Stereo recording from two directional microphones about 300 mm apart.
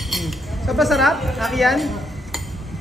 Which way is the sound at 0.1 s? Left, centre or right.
Centre.